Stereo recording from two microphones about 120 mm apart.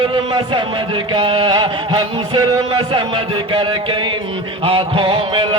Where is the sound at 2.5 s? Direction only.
40° right (ahead or behind).